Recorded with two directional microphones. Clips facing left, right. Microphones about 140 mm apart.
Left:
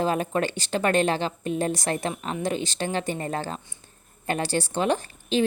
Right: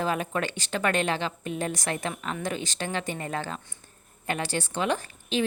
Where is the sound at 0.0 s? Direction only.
35° left (ahead or behind).